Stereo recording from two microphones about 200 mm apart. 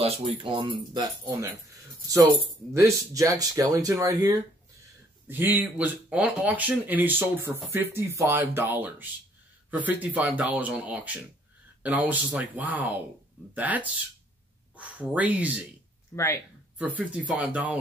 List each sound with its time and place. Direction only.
0.0 s speech: 30° right (ahead or behind)
2.7 s speech: 15° right (ahead or behind)
5.3 s speech: 10° right (ahead or behind)
16.7 s speech: 5° right (ahead or behind)